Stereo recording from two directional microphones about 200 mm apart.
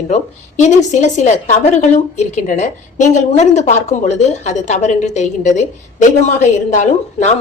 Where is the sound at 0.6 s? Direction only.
35° left (ahead or behind).